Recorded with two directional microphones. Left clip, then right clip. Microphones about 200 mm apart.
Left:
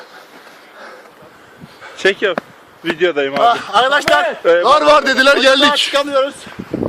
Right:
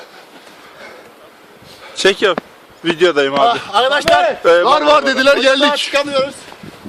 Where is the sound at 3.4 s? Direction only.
20° left (ahead or behind).